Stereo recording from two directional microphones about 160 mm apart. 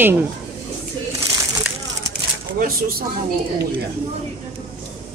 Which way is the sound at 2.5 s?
65° right (ahead or behind).